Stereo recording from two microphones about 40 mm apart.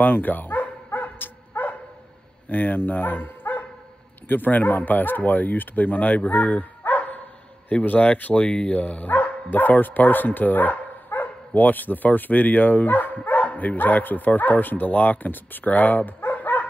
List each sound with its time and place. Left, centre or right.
0.0 s speech: left
0.9 s dog: left
1.5 s dog: left
2.5 s speech: left
6.9 s dog: left
7.8 s speech: left
8.5 s speech: left
16.3 s bow-wow: left